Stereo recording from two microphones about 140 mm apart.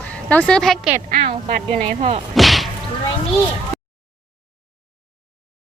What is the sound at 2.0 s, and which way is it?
Whip, 50° right (ahead or behind).